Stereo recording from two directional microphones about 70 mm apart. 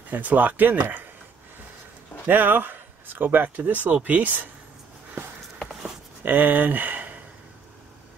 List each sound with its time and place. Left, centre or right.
0.1 s speech: right
2.2 s speech: right
5.6 s a sound: centre
6.2 s speech: right